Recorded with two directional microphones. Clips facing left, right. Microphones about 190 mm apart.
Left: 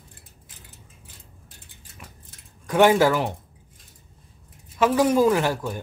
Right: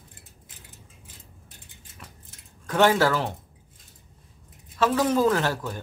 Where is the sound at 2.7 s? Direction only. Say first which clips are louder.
Left 3 dB; 15° left (ahead or behind).